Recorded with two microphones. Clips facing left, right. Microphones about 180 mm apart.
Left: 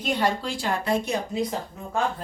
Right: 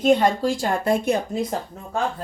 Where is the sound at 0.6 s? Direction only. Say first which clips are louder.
Right 4 dB; 50° right (ahead or behind).